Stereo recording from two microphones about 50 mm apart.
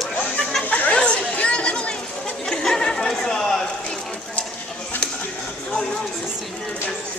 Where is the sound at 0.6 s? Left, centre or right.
Left.